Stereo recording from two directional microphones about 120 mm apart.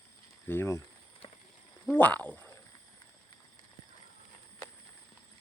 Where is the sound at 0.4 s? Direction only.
20° left (ahead or behind).